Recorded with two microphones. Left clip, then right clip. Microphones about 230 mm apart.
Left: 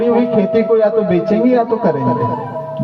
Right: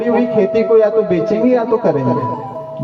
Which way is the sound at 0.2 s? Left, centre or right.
Left.